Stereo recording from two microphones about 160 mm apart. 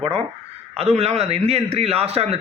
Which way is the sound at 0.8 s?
40° right (ahead or behind).